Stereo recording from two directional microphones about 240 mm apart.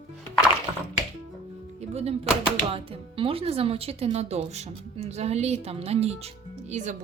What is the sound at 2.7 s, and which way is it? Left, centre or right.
Speech, right.